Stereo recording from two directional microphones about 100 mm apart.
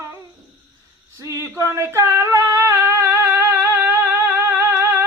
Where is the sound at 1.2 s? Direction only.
30° right (ahead or behind).